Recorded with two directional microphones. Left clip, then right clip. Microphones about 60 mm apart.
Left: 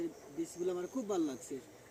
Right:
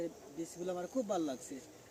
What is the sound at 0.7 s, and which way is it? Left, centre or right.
Speech, right.